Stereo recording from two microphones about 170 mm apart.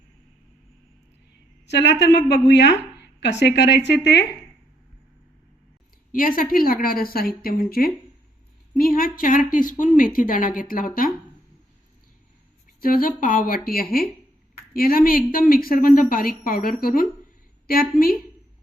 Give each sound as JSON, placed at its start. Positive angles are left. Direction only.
{"t": 1.6, "sound": "a woman's voice", "side_deg": 90}
{"t": 6.1, "sound": "a woman's voice", "side_deg": 55}
{"t": 12.8, "sound": "a woman's voice", "side_deg": 55}